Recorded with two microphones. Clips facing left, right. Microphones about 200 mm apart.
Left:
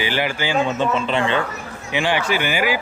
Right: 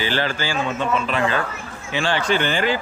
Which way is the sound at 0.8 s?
30° left (ahead or behind).